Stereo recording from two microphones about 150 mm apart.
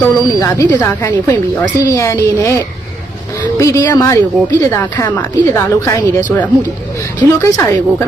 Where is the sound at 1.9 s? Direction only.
20° left (ahead or behind).